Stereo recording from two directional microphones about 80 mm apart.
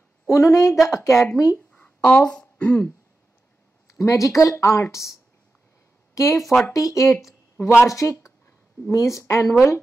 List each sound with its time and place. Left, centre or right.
0.3 s speech: left
1.8 s a sound: centre
3.8 s speech: left
6.1 s speech: left
6.4 s speech: centre
6.7 s speech: left